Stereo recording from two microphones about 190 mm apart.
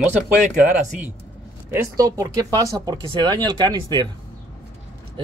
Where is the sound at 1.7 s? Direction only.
15° right (ahead or behind).